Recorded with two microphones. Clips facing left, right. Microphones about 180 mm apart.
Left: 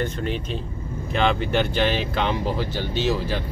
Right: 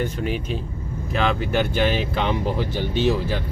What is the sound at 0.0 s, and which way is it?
Speech, 10° right (ahead or behind).